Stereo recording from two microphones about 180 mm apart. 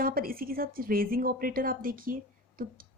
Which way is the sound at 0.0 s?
55° right (ahead or behind).